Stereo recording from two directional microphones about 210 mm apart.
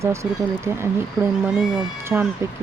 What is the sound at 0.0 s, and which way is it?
Speech, 15° right (ahead or behind).